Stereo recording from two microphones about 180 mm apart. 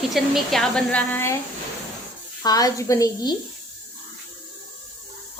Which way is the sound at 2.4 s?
20° left (ahead or behind).